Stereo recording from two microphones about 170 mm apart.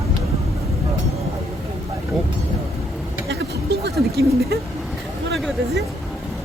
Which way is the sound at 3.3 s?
80° right.